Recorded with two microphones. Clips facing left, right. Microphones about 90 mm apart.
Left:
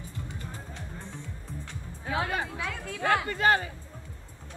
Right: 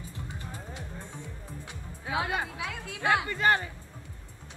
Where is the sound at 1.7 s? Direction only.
15° right (ahead or behind).